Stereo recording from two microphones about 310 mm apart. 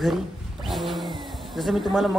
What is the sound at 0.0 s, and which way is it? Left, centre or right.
Roaring cats, centre.